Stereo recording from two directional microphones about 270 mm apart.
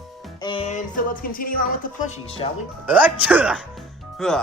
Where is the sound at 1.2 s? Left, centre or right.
Left.